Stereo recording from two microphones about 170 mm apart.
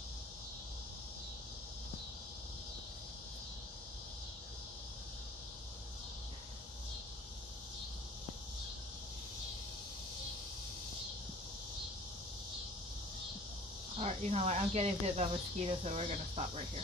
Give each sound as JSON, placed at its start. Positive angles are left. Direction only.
{"t": 13.9, "sound": "speech", "side_deg": -40}